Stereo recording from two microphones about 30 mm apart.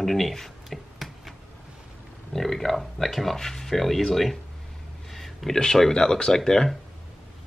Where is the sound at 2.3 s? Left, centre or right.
Centre.